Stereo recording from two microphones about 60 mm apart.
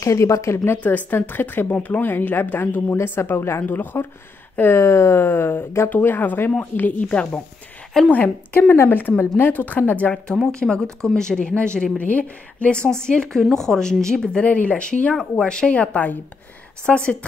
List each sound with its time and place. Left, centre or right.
0.0 s speech: left
0.8 s speech: left
4.7 s speech: left
7.0 s speech: centre
10.1 s speech: centre
14.4 s speech: left